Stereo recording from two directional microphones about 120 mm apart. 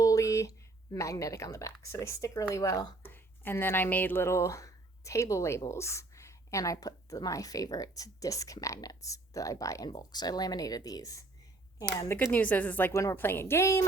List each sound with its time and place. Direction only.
0.0 s speech: 25° left (ahead or behind)
12.9 s a woman's voice: 25° left (ahead or behind)